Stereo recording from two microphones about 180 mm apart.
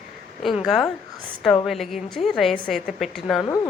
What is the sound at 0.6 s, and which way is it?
A woman's voice, centre (ahead or behind).